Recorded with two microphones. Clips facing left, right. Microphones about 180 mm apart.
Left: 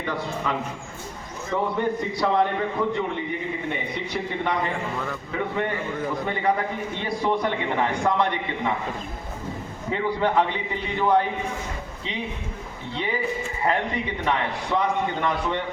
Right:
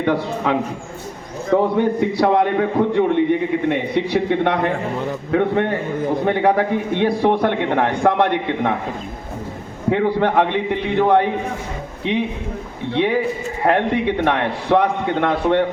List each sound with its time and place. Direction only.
0.0 s a man's voice: 65° right (ahead or behind)
9.9 s a man's voice: 60° right (ahead or behind)
12.9 s a man's voice: 65° right (ahead or behind)